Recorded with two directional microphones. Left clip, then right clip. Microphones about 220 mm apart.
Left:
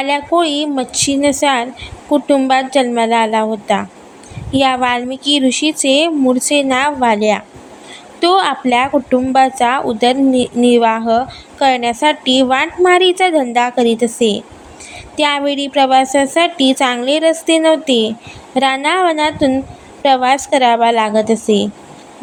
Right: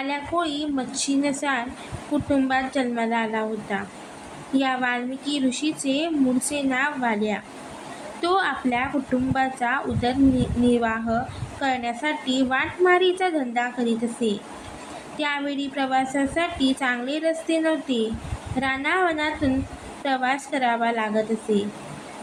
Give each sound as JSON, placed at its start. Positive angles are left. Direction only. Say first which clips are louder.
{"t": 0.0, "sound": "a woman's voice", "louder": "left 12 dB", "side_deg": 35}